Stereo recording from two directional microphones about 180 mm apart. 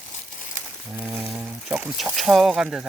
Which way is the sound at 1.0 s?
5° right (ahead or behind).